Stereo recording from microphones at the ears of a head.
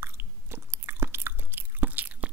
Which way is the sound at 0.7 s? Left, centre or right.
Right.